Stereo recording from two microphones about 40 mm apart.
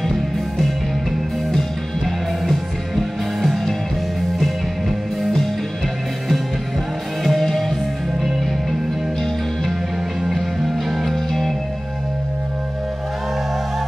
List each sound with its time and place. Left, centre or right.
1.5 s music: centre
4.4 s music: centre
7.2 s music: centre
10.3 s music: centre